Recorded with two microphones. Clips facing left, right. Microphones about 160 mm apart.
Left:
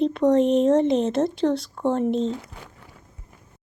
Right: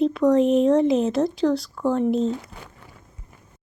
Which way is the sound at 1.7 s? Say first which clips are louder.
Right 1 dB; 30° left (ahead or behind).